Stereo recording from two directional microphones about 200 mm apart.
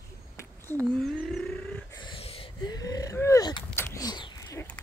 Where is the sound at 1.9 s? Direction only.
25° left (ahead or behind).